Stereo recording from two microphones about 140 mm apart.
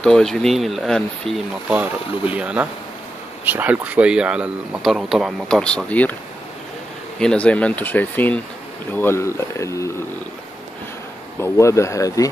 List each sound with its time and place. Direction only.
0.0 s speech: 5° left (ahead or behind)
1.7 s speech: 10° right (ahead or behind); by 6.1 s 10° left (ahead or behind)
7.2 s speech: 5° left (ahead or behind)
11.3 s speech: 20° left (ahead or behind)